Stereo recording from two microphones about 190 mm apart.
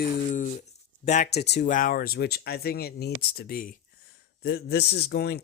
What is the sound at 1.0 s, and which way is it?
Speech, 35° left (ahead or behind).